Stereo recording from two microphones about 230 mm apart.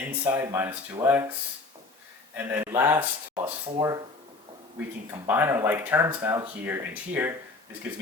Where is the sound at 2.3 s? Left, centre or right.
Centre.